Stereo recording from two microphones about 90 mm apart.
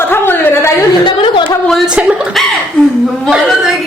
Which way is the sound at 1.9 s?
15° right (ahead or behind).